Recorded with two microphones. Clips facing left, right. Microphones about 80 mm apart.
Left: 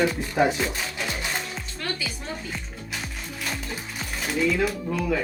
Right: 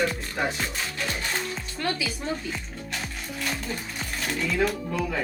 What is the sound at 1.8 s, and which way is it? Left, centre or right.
Speech, centre.